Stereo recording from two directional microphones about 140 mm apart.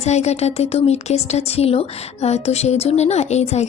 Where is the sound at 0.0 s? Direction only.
50° left (ahead or behind).